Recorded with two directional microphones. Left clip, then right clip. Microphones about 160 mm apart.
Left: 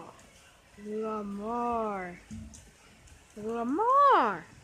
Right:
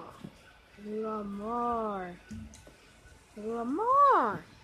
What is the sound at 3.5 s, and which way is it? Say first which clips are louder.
Speech: left 1 dB; 10° left (ahead or behind).